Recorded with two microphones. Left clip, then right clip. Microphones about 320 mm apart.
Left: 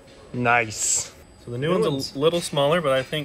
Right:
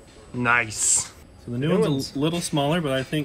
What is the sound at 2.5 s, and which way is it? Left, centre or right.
Speech, left.